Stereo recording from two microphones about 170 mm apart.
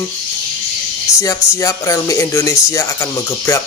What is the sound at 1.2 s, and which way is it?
Speech, 20° left (ahead or behind).